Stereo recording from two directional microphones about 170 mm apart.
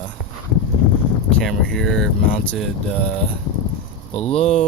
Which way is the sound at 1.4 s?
5° left (ahead or behind).